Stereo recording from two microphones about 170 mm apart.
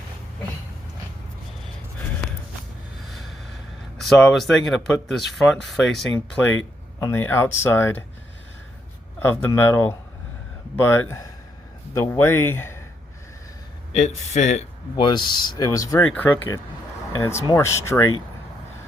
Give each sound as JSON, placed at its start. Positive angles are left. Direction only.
{"t": 3.0, "sound": "speech", "side_deg": 0}
{"t": 9.2, "sound": "speech", "side_deg": 15}
{"t": 13.9, "sound": "speech", "side_deg": 40}
{"t": 14.9, "sound": "speech", "side_deg": 25}